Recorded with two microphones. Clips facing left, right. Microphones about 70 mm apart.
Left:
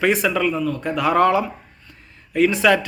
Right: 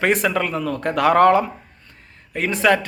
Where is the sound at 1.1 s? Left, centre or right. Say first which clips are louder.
Right 2 dB; right.